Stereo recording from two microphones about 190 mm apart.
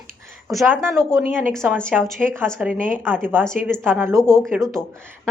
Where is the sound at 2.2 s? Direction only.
10° right (ahead or behind).